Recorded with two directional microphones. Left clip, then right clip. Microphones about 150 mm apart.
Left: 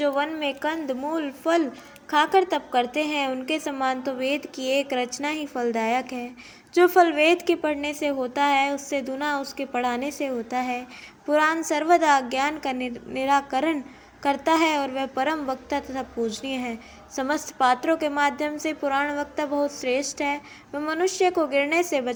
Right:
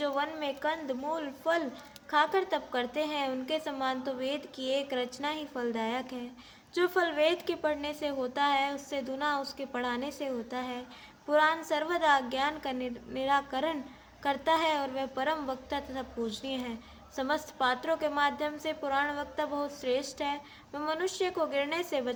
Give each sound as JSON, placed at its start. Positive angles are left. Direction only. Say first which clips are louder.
{"t": 0.0, "sound": "a woman's voice", "louder": "left 8 dB", "side_deg": 25}